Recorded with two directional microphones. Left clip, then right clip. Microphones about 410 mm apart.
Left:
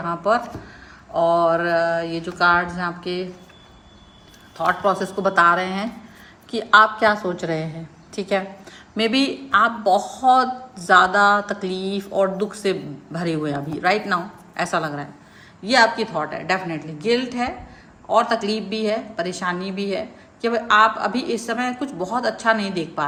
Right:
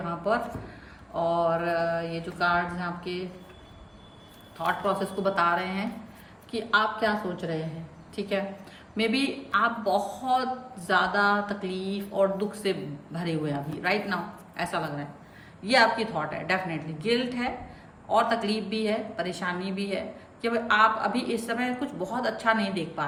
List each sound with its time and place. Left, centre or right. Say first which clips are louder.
0.0 s a woman's voice: left 7 dB; centre
4.5 s a woman's voice: left 7 dB; centre
8.1 s a woman's voice: left 7 dB; centre